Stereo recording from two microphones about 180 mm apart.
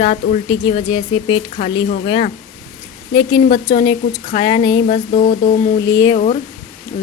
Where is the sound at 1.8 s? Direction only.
50° left (ahead or behind).